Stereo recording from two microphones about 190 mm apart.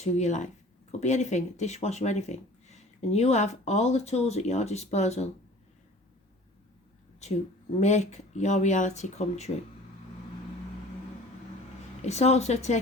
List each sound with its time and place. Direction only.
0.0 s speech: 35° left (ahead or behind)
7.8 s speech: 35° left (ahead or behind)
12.0 s speech: 35° left (ahead or behind)